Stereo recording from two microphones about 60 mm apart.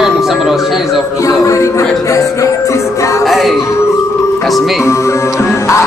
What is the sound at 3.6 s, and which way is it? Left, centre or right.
Music, left.